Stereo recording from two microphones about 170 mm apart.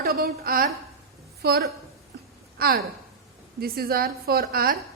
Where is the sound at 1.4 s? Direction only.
70° right (ahead or behind).